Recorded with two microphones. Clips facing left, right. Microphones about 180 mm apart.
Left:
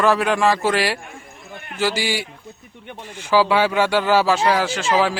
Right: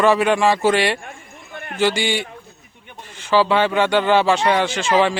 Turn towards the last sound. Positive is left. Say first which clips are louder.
# right 2 dB
turn(degrees=0)  # may be behind; listen again after turning